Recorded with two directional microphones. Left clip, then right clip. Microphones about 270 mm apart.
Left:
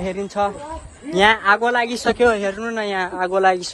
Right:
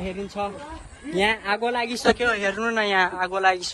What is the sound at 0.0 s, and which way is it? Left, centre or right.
Speech, centre.